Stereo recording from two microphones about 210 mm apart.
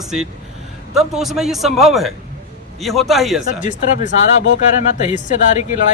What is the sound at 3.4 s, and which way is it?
Speech, 35° left (ahead or behind).